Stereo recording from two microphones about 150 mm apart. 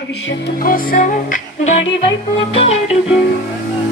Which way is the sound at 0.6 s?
70° left (ahead or behind).